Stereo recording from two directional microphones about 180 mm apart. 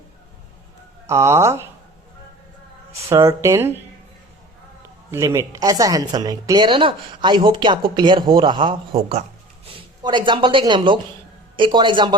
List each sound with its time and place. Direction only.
1.0 s speech: 15° right (ahead or behind)
3.1 s speech: 15° right (ahead or behind)
5.1 s a woman's voice: 15° right (ahead or behind)